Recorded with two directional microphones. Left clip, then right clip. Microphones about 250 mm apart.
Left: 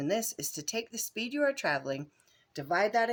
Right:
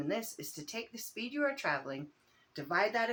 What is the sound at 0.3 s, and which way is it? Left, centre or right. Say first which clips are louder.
Speech: left 7 dB; left.